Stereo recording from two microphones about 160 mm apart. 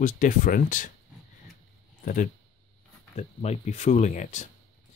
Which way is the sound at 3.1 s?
45° left (ahead or behind).